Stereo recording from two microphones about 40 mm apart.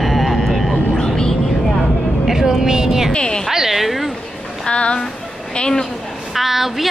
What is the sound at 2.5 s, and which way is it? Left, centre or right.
Speech, centre.